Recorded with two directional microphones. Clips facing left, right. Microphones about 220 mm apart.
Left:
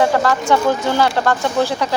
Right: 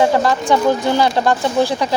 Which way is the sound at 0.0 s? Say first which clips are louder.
Right 1 dB; 15° right (ahead or behind).